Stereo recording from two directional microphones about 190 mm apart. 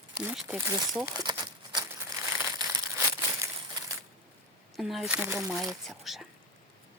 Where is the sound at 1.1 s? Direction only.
20° right (ahead or behind).